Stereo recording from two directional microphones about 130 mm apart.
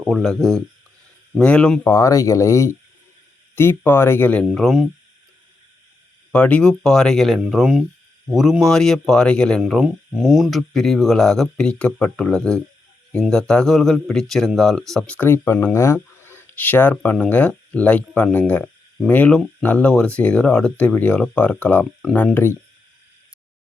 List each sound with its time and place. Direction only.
0.0 s speech: centre (ahead or behind)
1.9 s speech: 25° left (ahead or behind)
4.5 s speech: centre (ahead or behind)
6.3 s speech: 10° left (ahead or behind)
9.6 s speech: 5° right (ahead or behind); by 22.3 s 15° left (ahead or behind)